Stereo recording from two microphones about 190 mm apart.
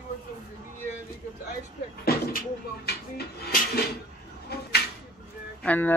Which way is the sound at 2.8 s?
55° left (ahead or behind).